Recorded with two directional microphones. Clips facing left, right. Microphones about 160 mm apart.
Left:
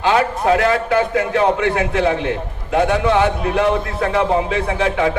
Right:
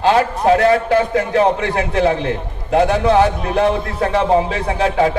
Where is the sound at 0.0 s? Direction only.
35° right (ahead or behind).